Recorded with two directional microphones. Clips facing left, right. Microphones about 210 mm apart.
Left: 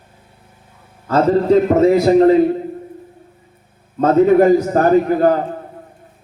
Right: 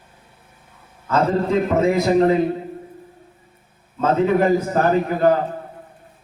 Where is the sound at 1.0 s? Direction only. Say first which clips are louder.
Left 6 dB; 35° left (ahead or behind).